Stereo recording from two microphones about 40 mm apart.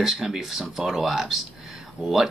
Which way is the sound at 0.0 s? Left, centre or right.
Centre.